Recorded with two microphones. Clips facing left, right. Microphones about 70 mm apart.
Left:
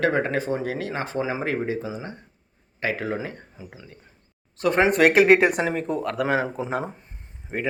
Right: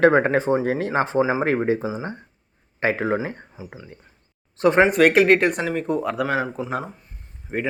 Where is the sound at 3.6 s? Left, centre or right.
Centre.